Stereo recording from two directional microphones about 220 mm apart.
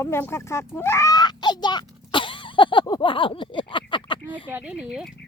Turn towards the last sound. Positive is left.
turn(degrees=-5)  # may be behind; listen again after turning